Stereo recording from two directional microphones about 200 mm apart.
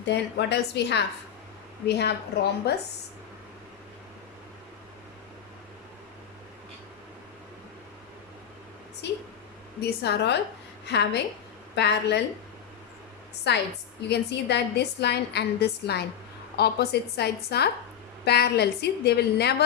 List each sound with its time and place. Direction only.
0.0 s a woman's voice: 55° left (ahead or behind)
9.0 s a woman's voice: 60° left (ahead or behind)
13.5 s a woman's voice: 60° left (ahead or behind)